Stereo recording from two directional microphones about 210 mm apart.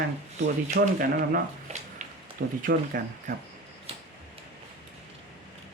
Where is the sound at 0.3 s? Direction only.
40° right (ahead or behind).